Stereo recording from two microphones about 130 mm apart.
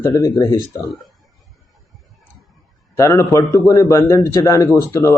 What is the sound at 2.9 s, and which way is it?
A man's voice, 20° left (ahead or behind).